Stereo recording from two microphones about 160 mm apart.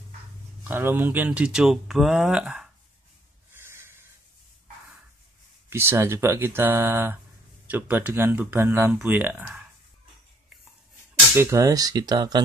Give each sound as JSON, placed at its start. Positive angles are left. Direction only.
{"t": 0.7, "sound": "speech", "side_deg": -15}
{"t": 3.5, "sound": "snort", "side_deg": -15}
{"t": 5.7, "sound": "speech", "side_deg": -15}
{"t": 11.3, "sound": "speech", "side_deg": -20}